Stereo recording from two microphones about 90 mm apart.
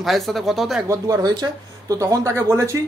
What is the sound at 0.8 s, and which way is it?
Speech, 40° right (ahead or behind).